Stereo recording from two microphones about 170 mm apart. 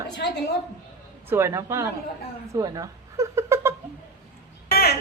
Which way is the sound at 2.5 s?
20° right (ahead or behind).